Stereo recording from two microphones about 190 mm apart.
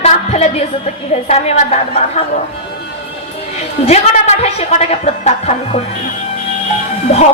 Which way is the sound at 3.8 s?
35° left (ahead or behind).